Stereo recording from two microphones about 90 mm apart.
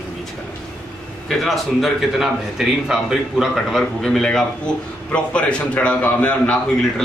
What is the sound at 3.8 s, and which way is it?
A man's voice, 10° left (ahead or behind).